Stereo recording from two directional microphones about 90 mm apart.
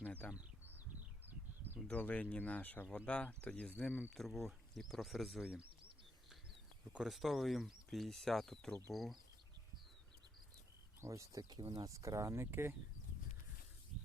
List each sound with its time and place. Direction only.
0.0 s a sound: 20° left (ahead or behind)
0.3 s a sound: 20° right (ahead or behind)
1.2 s bird: 20° right (ahead or behind)
1.9 s speech: 15° left (ahead or behind)
4.1 s speech: centre (ahead or behind)
6.9 s speech: 5° right (ahead or behind)
11.0 s speech: 35° right (ahead or behind)
11.4 s speech: 50° right (ahead or behind)
11.8 s speech: 35° right (ahead or behind)